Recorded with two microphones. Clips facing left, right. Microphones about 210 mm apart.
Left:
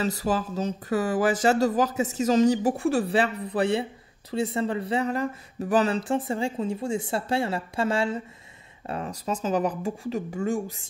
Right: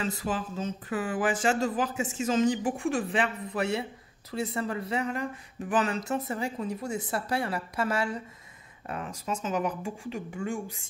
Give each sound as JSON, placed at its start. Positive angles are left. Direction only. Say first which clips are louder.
{"t": 0.0, "sound": "speech", "louder": "left 5 dB", "side_deg": 40}